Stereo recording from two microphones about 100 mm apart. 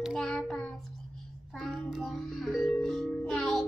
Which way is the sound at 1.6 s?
Centre (ahead or behind).